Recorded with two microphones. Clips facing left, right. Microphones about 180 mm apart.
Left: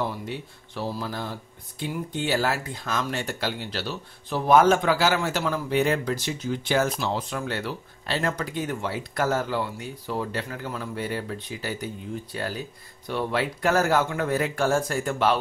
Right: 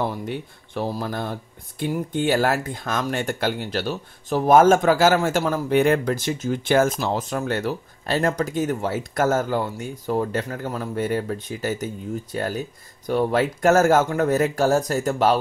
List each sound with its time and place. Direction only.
0.3 s speech: 50° right (ahead or behind)